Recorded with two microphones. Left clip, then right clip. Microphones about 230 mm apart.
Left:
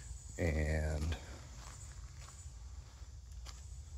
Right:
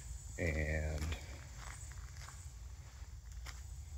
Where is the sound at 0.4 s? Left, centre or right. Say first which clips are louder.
Left 1 dB; left.